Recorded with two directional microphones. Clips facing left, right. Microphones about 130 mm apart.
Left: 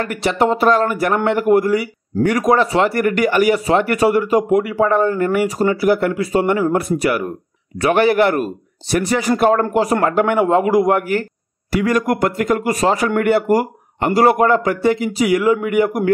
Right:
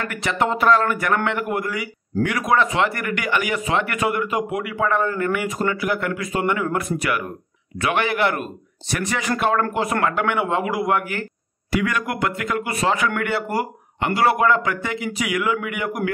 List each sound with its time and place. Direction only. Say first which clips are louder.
0.0 s speech: left 6 dB; 35° left (ahead or behind)